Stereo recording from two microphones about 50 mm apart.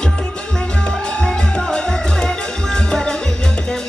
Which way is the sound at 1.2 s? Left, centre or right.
Centre.